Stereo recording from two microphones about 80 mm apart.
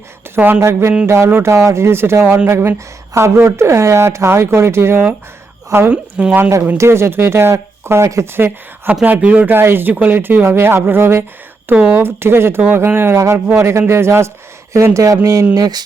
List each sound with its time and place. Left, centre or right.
0.3 s speech: right
0.6 s speech: right
5.9 s speech: centre
6.7 s speech: right
11.7 s speech: centre
12.0 s speech: right
13.1 s speech: right
15.5 s speech: right